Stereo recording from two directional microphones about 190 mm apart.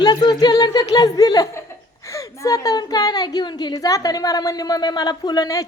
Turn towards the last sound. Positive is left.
turn(degrees=20)  # may be behind; listen again after turning